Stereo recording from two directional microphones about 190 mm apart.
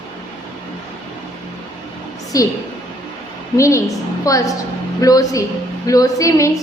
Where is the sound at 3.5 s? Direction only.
15° left (ahead or behind).